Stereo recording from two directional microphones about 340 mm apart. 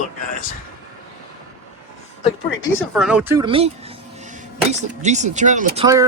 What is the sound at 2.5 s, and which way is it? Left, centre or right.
Speech, left.